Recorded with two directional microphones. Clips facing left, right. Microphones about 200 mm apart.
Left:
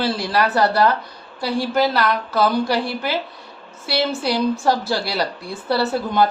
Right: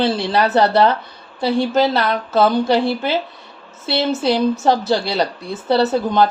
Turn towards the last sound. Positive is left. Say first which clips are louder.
# right 3 dB
turn(degrees=-20)  # may be behind; listen again after turning